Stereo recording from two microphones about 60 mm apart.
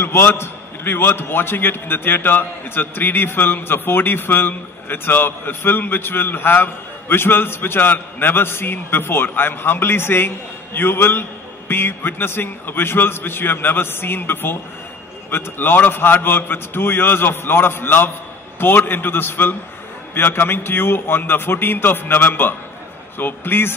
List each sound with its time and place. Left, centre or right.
0.0 s a man's voice: left